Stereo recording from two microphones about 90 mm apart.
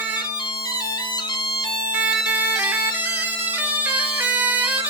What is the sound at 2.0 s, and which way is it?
Bagpipes, 15° right (ahead or behind).